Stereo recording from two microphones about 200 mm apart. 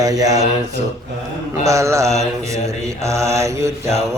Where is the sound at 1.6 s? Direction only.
15° right (ahead or behind).